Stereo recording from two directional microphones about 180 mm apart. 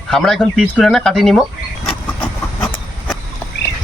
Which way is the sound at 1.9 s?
5° left (ahead or behind).